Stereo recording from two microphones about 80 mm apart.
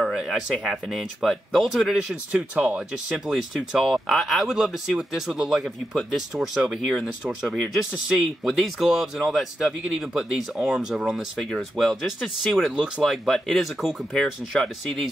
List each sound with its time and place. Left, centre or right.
0.0 s speech: centre
2.5 s speech: centre
2.9 s speech: centre
13.3 s speech: centre